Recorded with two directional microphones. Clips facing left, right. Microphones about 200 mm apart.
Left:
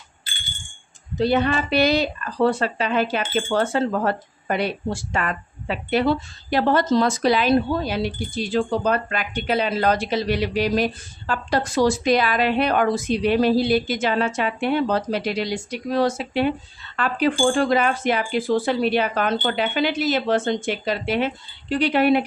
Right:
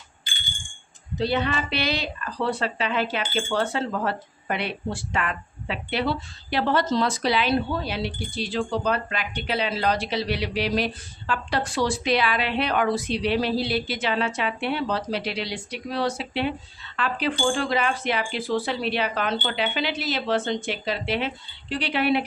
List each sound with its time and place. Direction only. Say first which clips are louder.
1.2 s speech: left 5 dB; 50° left (ahead or behind)